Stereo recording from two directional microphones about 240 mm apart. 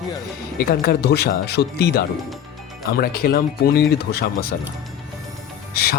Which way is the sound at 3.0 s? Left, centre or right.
Left.